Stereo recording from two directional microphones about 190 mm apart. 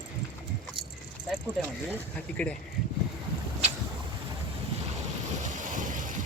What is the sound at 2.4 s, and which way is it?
Speech, 5° left (ahead or behind).